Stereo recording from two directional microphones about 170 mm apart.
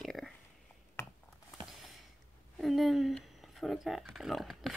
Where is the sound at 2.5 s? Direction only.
Centre (ahead or behind).